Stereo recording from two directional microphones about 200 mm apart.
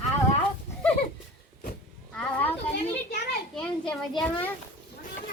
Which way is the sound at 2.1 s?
10° left (ahead or behind).